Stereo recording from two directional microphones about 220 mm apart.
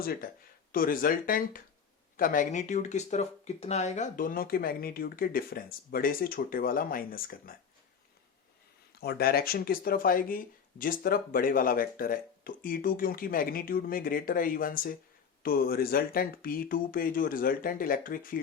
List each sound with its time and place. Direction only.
0.0 s speech: 40° left (ahead or behind)
9.0 s speech: 45° left (ahead or behind)